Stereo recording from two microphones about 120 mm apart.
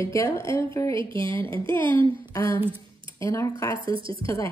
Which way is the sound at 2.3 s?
25° left (ahead or behind).